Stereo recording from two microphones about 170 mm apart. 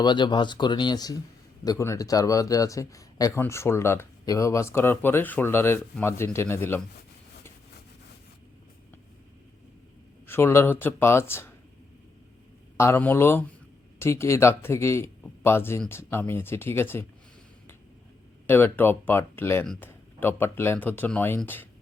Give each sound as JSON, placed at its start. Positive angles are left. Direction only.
{"t": 0.0, "sound": "speech", "side_deg": 25}
{"t": 10.2, "sound": "speech", "side_deg": 15}
{"t": 12.7, "sound": "speech", "side_deg": 15}
{"t": 15.2, "sound": "a sound", "side_deg": 15}
{"t": 15.9, "sound": "speech", "side_deg": 15}
{"t": 18.4, "sound": "speech", "side_deg": 10}